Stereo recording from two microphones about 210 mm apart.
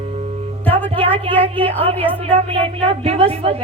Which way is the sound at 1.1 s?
25° right (ahead or behind).